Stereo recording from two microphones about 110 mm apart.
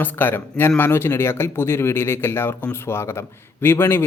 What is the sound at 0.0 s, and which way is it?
A man's voice, 20° left (ahead or behind).